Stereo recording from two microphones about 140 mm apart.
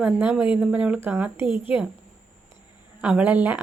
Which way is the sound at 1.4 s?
35° left (ahead or behind).